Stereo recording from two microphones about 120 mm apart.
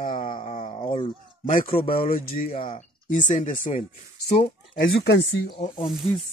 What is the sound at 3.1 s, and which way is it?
Speech, 90° left.